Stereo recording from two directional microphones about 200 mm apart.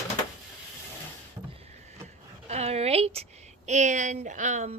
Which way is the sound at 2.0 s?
30° right (ahead or behind).